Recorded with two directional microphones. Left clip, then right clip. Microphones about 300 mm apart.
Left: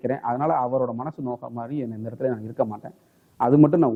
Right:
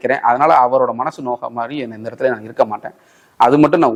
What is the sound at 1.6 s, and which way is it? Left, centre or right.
Speech, centre.